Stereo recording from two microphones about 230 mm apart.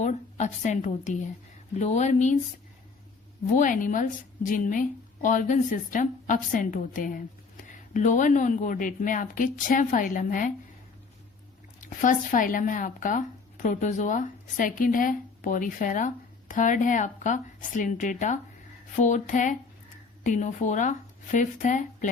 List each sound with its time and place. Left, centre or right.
0.0 s speech: left
3.5 s speech: left
11.8 s speech: left